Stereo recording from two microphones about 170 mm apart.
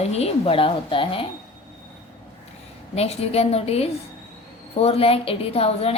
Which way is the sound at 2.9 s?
35° left (ahead or behind).